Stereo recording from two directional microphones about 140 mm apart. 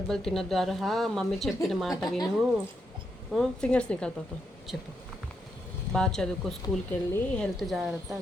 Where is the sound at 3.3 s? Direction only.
5° left (ahead or behind).